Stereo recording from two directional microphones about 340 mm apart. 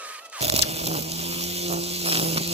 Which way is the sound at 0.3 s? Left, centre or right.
Centre.